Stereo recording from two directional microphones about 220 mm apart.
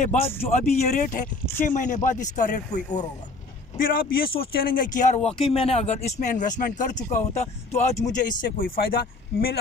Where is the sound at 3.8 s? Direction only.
40° left (ahead or behind).